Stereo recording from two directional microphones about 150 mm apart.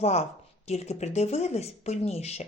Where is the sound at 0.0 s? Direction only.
45° left (ahead or behind).